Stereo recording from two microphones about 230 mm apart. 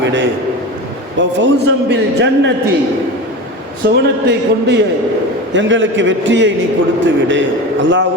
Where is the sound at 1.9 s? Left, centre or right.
Right.